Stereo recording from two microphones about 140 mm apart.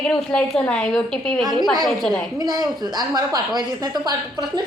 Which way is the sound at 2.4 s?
30° right (ahead or behind).